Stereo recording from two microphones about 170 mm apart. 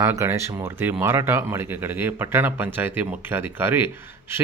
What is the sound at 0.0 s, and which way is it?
Speech, 15° right (ahead or behind).